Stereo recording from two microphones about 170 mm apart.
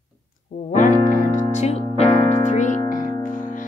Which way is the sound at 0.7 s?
50° left (ahead or behind).